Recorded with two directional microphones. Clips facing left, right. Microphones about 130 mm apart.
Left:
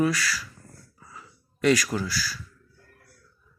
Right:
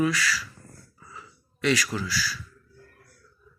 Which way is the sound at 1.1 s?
45° left (ahead or behind).